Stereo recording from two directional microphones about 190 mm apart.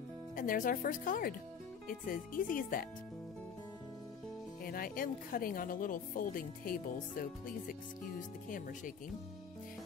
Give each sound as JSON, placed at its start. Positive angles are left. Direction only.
{"t": 0.4, "sound": "speech", "side_deg": 45}
{"t": 4.6, "sound": "speech", "side_deg": 50}